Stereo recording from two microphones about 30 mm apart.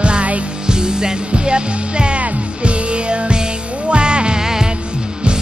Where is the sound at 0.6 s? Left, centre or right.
Right.